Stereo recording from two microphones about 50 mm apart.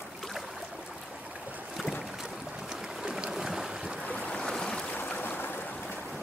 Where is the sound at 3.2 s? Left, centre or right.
Centre.